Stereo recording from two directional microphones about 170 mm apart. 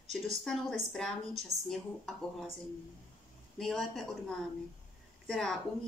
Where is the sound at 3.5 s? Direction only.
Centre (ahead or behind).